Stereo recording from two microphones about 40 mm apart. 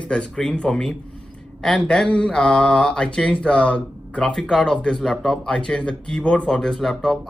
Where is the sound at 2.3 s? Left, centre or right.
Centre.